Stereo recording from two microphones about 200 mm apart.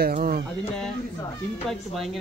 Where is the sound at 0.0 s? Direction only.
45° right (ahead or behind).